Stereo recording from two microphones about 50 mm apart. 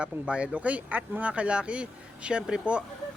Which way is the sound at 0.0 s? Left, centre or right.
Right.